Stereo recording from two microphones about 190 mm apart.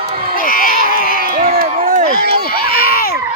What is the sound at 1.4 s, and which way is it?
Crowd, 50° right (ahead or behind).